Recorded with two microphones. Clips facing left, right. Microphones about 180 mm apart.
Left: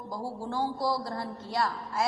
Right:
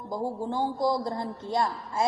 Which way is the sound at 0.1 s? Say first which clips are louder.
Right 5 dB; 20° right (ahead or behind).